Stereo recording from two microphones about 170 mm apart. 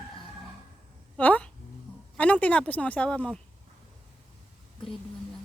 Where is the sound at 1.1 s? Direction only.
5° left (ahead or behind).